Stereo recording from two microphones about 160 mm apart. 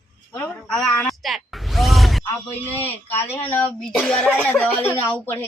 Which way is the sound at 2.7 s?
10° left (ahead or behind).